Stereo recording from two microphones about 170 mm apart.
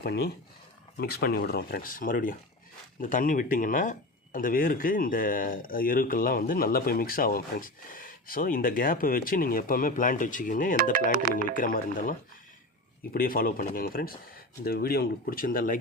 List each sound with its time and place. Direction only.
0.0 s speech: 70° left (ahead or behind); by 10.8 s 50° left (ahead or behind)
10.9 s speech: 55° right (ahead or behind)
11.5 s speech: 55° left (ahead or behind)
13.1 s speech: 60° left (ahead or behind)